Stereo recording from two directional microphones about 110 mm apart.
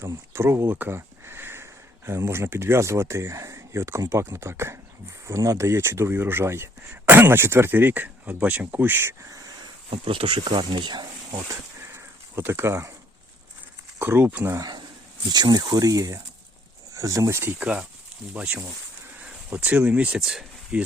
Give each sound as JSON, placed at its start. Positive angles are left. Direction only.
{"t": 0.0, "sound": "speech", "side_deg": -25}
{"t": 9.9, "sound": "speech", "side_deg": -55}
{"t": 11.4, "sound": "a sound", "side_deg": -25}
{"t": 14.0, "sound": "speech", "side_deg": -20}
{"t": 14.6, "sound": "speech", "side_deg": -40}
{"t": 17.6, "sound": "speech", "side_deg": -10}